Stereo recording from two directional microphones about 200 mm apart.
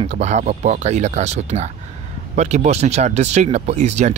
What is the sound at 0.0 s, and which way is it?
Speech, 35° right (ahead or behind).